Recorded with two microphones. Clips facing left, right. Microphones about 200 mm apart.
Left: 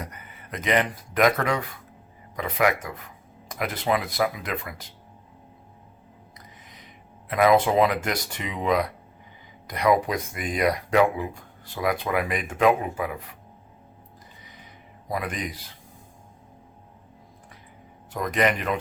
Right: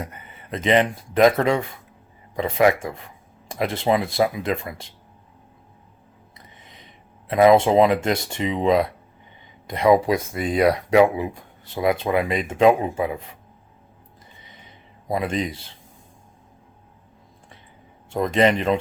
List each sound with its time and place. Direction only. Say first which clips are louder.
0.0 s speech: right 4 dB; 25° right (ahead or behind)
7.3 s speech: right 5 dB; 25° right (ahead or behind)
15.0 s speech: right 6 dB; 25° right (ahead or behind)
18.1 s speech: right 5 dB; 25° right (ahead or behind)